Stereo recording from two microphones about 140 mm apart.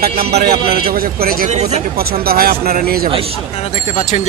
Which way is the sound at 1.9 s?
90° right.